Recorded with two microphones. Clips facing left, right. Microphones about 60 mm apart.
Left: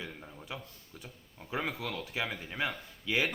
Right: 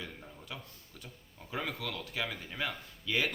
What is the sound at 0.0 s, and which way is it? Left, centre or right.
A man's voice, centre.